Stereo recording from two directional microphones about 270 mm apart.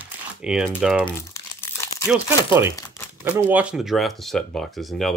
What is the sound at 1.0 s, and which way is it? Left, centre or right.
Crumpling, centre.